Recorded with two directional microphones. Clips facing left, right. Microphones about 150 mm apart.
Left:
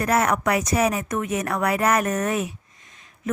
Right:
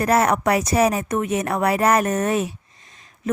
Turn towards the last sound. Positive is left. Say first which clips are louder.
# right 1 dB
turn(degrees=-35)  # may be behind; listen again after turning